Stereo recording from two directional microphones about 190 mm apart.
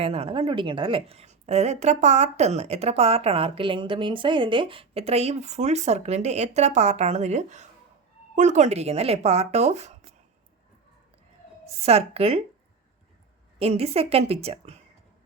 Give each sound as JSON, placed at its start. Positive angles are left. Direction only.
{"t": 0.0, "sound": "a woman's voice", "side_deg": -30}
{"t": 11.8, "sound": "a woman's voice", "side_deg": -35}
{"t": 13.6, "sound": "a woman's voice", "side_deg": -30}